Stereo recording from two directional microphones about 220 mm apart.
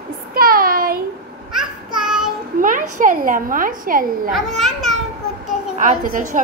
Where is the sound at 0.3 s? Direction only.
40° right (ahead or behind).